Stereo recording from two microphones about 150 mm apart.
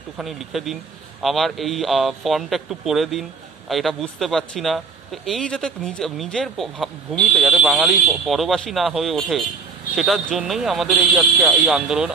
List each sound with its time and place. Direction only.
0.2 s speech: centre (ahead or behind)